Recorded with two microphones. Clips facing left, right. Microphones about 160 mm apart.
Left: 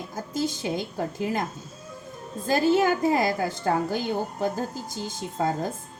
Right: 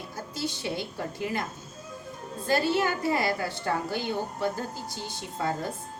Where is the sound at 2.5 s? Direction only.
45° left (ahead or behind).